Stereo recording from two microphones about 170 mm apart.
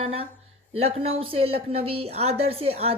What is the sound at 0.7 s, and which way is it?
A woman's voice, 35° right (ahead or behind).